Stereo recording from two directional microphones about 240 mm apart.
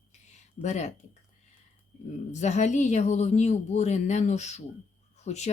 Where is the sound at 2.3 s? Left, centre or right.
Left.